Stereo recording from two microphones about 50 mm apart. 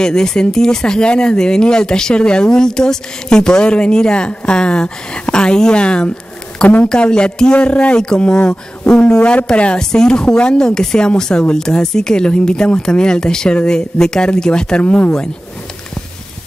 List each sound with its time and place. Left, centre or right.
0.0 s speech: centre